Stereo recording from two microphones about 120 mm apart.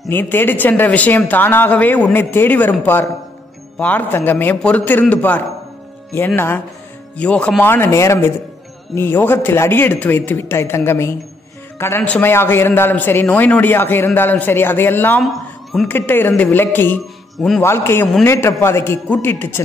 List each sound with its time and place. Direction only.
0.1 s a man's voice: 15° left (ahead or behind)
7.7 s a man's voice: 20° left (ahead or behind)